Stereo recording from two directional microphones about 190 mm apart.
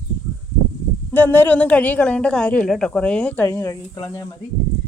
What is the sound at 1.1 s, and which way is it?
A woman's voice, 10° left (ahead or behind).